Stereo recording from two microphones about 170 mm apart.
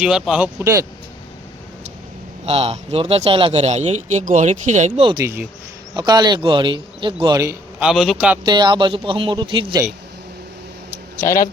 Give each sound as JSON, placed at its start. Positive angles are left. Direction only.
{"t": 0.0, "sound": "speech", "side_deg": -5}
{"t": 2.5, "sound": "a man's voice", "side_deg": -35}
{"t": 5.2, "sound": "speech", "side_deg": -15}
{"t": 6.0, "sound": "speech", "side_deg": -25}
{"t": 7.8, "sound": "a man's voice", "side_deg": 0}
{"t": 8.4, "sound": "speech", "side_deg": -25}
{"t": 11.2, "sound": "speech", "side_deg": 15}